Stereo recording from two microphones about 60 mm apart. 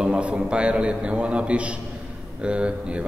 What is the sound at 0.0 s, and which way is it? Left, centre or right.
A man's voice, centre.